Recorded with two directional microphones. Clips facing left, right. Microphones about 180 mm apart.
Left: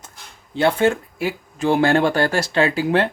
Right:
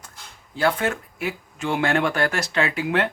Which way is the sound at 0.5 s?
25° left (ahead or behind).